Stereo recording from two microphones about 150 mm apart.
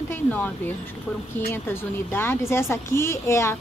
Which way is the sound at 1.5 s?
15° left (ahead or behind).